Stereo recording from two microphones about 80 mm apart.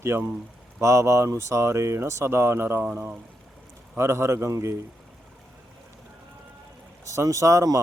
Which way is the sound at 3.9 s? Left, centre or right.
Right.